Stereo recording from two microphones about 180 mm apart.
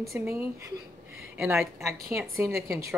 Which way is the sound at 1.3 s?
10° right (ahead or behind).